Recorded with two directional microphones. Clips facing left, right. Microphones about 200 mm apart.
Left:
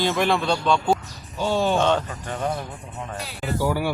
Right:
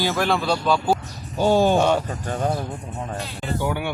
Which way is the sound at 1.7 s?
10° right (ahead or behind).